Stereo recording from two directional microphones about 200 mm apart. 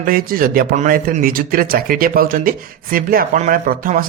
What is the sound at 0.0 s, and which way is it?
A man's voice, 45° right (ahead or behind).